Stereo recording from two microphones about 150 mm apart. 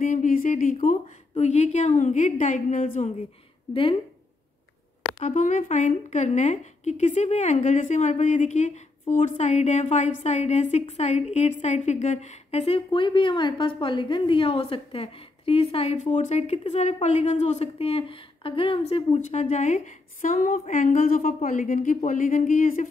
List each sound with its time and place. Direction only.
0.0 s speech: 60° left (ahead or behind)
1.3 s a woman's voice: 50° left (ahead or behind)
5.2 s a woman's voice: 50° left (ahead or behind)
19.1 s a woman's voice: 50° left (ahead or behind)